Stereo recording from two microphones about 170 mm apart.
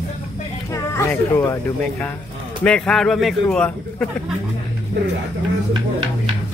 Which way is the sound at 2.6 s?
5° left (ahead or behind).